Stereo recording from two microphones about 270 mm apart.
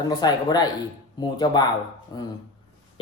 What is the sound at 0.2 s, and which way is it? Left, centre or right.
Speech, centre.